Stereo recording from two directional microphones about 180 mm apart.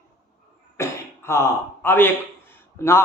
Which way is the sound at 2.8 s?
15° left (ahead or behind).